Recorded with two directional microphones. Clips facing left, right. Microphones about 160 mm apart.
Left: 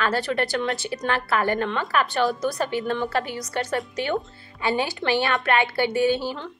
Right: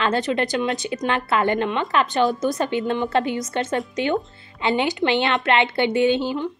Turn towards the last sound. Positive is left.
turn(degrees=-20)  # may be behind; listen again after turning